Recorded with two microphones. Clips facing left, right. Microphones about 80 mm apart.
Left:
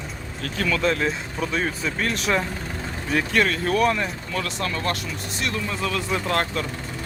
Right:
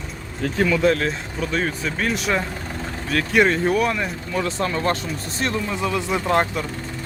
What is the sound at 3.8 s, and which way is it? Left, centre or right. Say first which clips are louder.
Speech: even; centre.